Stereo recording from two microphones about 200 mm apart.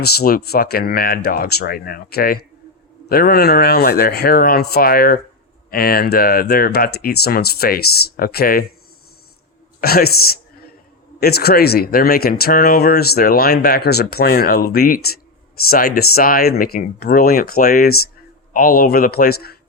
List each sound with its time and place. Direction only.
0.0 s speech: 50° left (ahead or behind)
9.8 s speech: 50° left (ahead or behind)
11.2 s speech: 50° left (ahead or behind)